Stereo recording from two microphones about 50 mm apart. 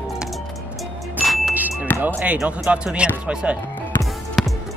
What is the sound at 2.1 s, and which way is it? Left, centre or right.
Speech, right.